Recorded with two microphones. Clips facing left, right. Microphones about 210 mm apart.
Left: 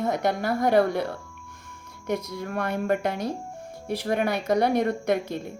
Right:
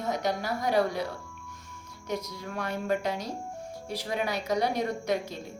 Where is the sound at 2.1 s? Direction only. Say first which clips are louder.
Left 5 dB; 55° left (ahead or behind).